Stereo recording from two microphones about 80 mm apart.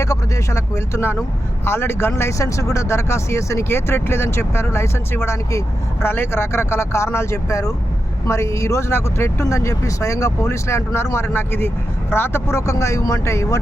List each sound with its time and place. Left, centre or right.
0.0 s speech: left